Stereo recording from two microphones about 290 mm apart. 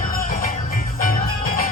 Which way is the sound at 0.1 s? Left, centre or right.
Left.